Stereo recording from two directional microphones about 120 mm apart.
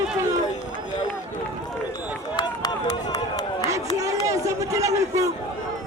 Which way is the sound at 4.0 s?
25° right (ahead or behind).